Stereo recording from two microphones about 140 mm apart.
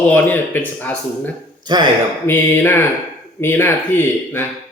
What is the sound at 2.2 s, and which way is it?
Speech, 15° left (ahead or behind).